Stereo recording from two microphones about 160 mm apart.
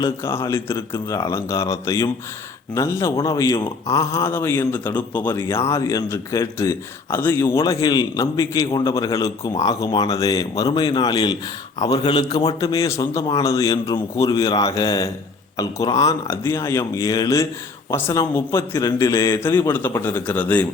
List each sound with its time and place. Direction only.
0.0 s a man's voice: 15° left (ahead or behind)